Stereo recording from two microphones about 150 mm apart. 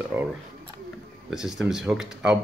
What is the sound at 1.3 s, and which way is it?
Speech, 5° right (ahead or behind).